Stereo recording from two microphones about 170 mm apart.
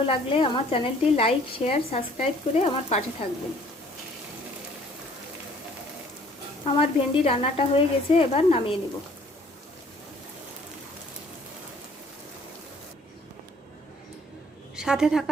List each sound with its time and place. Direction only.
0.0 s speech: 30° left (ahead or behind)
6.7 s speech: 35° left (ahead or behind)
14.8 s a woman's voice: 5° right (ahead or behind)